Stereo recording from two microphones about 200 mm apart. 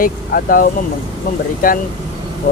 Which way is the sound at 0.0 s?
45° left (ahead or behind).